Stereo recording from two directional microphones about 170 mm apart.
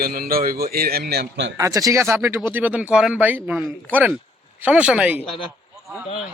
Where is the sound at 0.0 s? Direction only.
60° right (ahead or behind); by 1.5 s 80° right.